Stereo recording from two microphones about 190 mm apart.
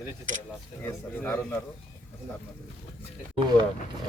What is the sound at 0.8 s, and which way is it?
Speech, 10° left (ahead or behind).